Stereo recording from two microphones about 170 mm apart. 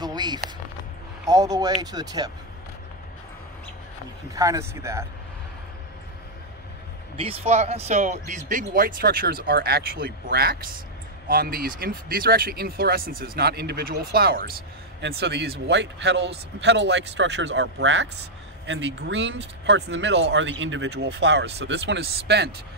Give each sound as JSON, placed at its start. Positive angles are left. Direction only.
{"t": 0.0, "sound": "a sound", "side_deg": -25}
{"t": 1.2, "sound": "speech", "side_deg": -20}
{"t": 4.4, "sound": "speech", "side_deg": -20}
{"t": 7.2, "sound": "speech", "side_deg": -35}
{"t": 15.0, "sound": "speech", "side_deg": -75}